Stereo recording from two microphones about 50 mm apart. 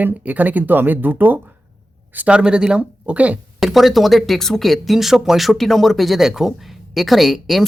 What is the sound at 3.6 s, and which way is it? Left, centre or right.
Speech, centre.